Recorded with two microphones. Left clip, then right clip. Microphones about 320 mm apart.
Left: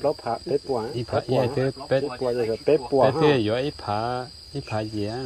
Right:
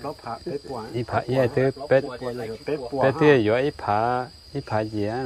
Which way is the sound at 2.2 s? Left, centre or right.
Left.